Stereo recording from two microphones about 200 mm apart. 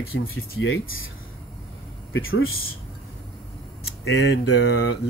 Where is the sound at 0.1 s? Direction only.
90° left.